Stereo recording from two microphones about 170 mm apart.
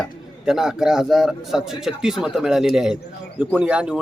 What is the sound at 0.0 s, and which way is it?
Speech, 5° right (ahead or behind).